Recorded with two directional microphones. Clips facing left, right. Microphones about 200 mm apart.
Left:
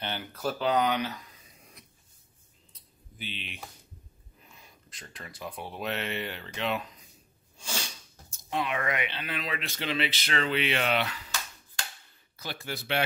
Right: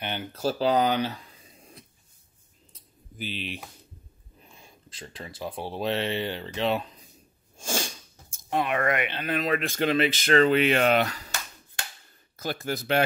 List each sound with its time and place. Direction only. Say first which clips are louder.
0.0 s a sound: right 4 dB; 20° right (ahead or behind)
3.2 s speech: right 7 dB; 40° right (ahead or behind)
4.5 s speech: right 3 dB; 30° right (ahead or behind)
7.5 s speech: right 7 dB; 45° right (ahead or behind)
12.4 s speech: right 7 dB; 45° right (ahead or behind)